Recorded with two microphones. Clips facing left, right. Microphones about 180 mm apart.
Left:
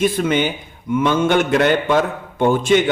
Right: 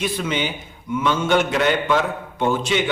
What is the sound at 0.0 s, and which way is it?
A man's voice, 50° left (ahead or behind).